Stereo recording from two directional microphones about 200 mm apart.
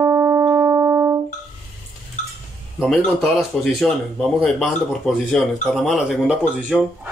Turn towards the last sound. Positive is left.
turn(degrees=-5)  # may be behind; listen again after turning